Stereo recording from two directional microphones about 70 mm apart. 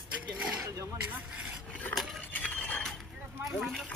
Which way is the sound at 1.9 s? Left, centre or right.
Centre.